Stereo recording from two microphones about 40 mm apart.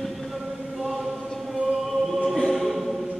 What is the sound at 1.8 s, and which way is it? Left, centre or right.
Choir, centre.